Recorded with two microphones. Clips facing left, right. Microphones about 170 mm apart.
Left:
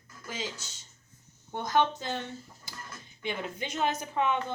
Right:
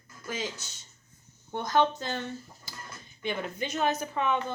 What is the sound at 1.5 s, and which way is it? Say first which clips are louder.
Speech: right 1 dB; 15° left (ahead or behind).